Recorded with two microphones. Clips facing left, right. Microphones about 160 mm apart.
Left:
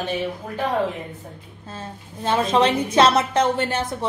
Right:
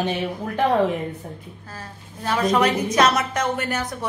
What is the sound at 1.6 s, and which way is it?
A woman's voice, 25° left (ahead or behind).